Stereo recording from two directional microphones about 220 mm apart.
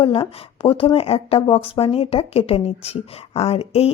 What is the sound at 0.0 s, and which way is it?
Speech, 25° left (ahead or behind).